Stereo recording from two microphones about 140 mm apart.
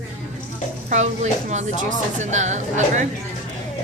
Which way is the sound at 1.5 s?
55° right (ahead or behind).